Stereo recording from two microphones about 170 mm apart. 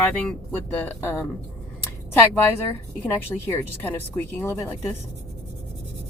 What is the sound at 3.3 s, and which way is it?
Speech, 10° left (ahead or behind).